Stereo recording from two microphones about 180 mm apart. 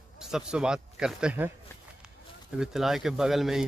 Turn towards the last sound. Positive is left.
turn(degrees=0)  # may be behind; listen again after turning